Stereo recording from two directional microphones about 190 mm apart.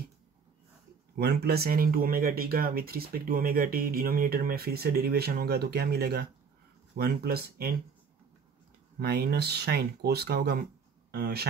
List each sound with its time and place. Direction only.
1.1 s speech: 60° right (ahead or behind)
9.0 s speech: 55° right (ahead or behind)